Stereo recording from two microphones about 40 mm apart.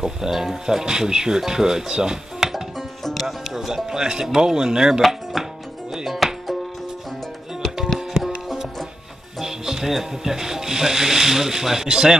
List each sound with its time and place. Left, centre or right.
0.0 s speech: centre
2.5 s music: centre
3.2 s music: centre
4.3 s speech: centre
5.0 s music: centre
5.9 s music: centre
6.1 s music: centre
9.4 s speech: centre